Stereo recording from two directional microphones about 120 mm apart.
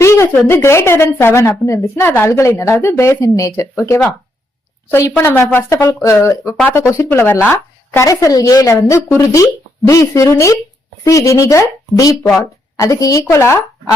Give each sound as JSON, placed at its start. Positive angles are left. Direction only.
{"t": 0.0, "sound": "a woman's voice", "side_deg": 25}